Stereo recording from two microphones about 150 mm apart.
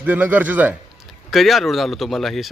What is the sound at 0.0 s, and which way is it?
Speech, 10° right (ahead or behind).